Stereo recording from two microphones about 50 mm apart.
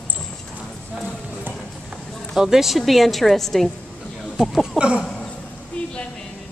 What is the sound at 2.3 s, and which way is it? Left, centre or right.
A woman's voice, centre.